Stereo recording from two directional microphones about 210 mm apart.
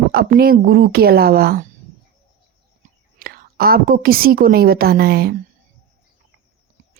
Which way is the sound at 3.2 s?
45° right (ahead or behind).